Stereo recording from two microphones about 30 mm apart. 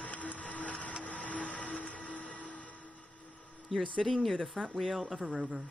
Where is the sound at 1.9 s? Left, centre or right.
Left.